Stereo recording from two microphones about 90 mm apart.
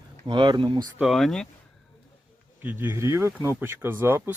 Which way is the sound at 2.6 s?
20° right (ahead or behind).